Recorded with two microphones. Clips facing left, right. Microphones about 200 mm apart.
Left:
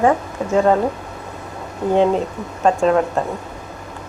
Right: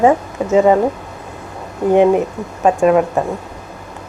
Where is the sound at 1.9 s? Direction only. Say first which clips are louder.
Right 4 dB; 15° right (ahead or behind).